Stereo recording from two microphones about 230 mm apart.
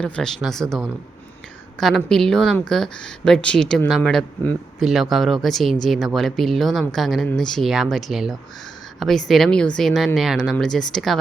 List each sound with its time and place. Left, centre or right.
0.0 s speech: centre